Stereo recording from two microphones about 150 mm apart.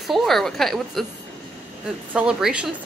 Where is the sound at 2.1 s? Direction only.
5° right (ahead or behind).